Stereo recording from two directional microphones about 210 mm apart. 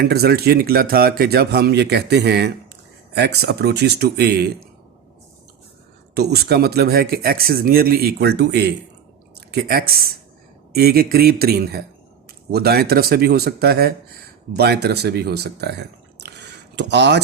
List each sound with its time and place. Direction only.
0.0 s speech: 50° right (ahead or behind)
6.1 s speech: 50° right (ahead or behind)